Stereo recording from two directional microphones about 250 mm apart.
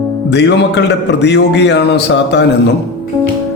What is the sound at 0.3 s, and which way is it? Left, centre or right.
A man's voice, left.